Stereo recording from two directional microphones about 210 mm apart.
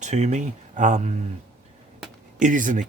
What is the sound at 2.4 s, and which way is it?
Speech, 40° right (ahead or behind).